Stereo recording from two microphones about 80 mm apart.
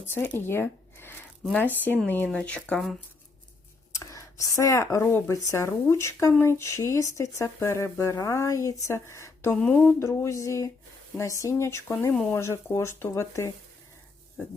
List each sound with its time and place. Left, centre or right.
0.0 s speech: left
3.9 s speech: left
9.6 s speech: centre
10.0 s speech: left